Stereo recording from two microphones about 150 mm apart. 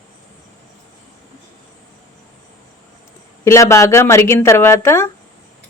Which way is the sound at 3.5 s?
20° left (ahead or behind).